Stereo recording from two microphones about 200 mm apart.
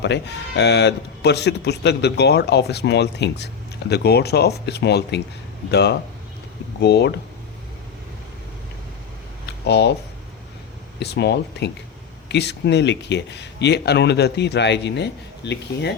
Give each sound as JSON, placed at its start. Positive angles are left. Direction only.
{"t": 0.0, "sound": "speech", "side_deg": 60}
{"t": 9.5, "sound": "a sound", "side_deg": 55}
{"t": 11.0, "sound": "speech", "side_deg": 55}